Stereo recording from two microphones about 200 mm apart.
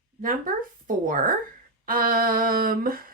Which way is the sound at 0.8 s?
40° right (ahead or behind).